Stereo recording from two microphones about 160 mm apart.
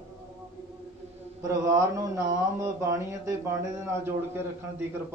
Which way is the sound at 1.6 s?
20° right (ahead or behind).